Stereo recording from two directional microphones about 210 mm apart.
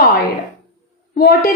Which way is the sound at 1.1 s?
45° left (ahead or behind).